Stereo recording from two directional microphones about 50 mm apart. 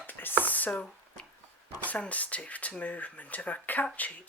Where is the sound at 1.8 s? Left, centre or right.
Left.